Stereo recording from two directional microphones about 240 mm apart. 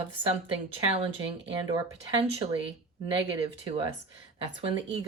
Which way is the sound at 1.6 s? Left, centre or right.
Centre.